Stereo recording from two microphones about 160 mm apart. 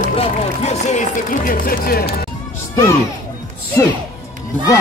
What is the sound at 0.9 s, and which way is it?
Speech, 60° left (ahead or behind).